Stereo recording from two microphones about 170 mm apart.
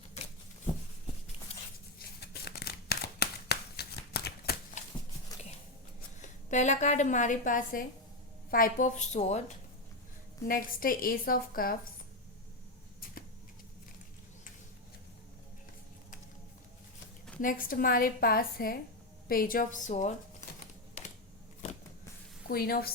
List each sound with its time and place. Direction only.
2.0 s scissors: 70° left (ahead or behind)
6.5 s a woman's voice: 45° left (ahead or behind)
10.4 s a woman's voice: 55° left (ahead or behind)
17.4 s a woman's voice: 55° left (ahead or behind)
22.4 s a woman's voice: 60° left (ahead or behind)